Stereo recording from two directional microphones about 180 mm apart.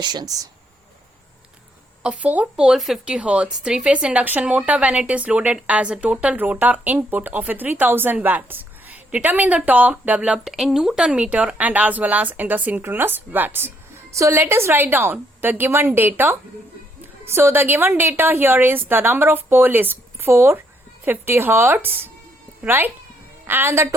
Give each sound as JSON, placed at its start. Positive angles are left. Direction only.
{"t": 0.0, "sound": "speech", "side_deg": -25}
{"t": 2.0, "sound": "speech", "side_deg": -5}